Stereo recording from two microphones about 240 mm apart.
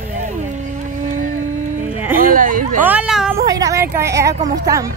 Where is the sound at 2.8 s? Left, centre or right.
Centre.